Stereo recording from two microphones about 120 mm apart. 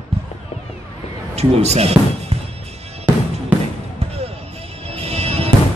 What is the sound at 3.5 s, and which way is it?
Basketball bounce, 10° right (ahead or behind).